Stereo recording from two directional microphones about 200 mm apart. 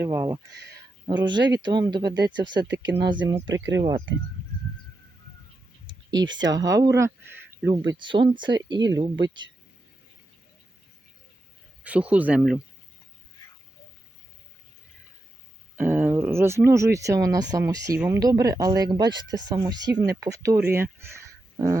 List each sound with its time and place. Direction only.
0.0 s speech: 15° right (ahead or behind)
2.6 s speech: 60° right (ahead or behind)
3.8 s speech: 15° right (ahead or behind)
5.9 s a sound: 20° right (ahead or behind)
6.4 s speech: 20° right (ahead or behind)
11.8 s speech: 5° right (ahead or behind)
15.7 s speech: 10° right (ahead or behind)